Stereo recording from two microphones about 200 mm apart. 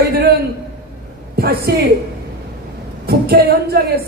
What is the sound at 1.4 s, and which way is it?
Speech, 50° right (ahead or behind).